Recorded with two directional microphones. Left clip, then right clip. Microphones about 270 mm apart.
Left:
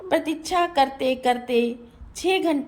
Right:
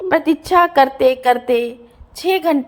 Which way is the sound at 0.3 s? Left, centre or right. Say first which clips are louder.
Right 10 dB; centre.